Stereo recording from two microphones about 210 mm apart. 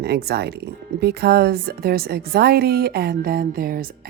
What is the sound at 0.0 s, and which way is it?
Speech, 50° right (ahead or behind).